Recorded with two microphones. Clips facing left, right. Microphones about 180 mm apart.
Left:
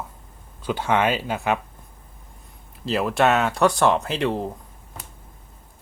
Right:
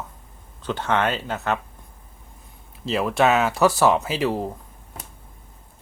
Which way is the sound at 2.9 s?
Centre (ahead or behind).